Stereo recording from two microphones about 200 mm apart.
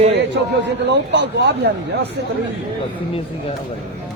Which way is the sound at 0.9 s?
60° right (ahead or behind).